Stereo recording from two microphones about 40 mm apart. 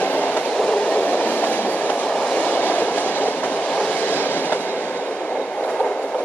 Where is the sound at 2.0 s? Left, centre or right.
Centre.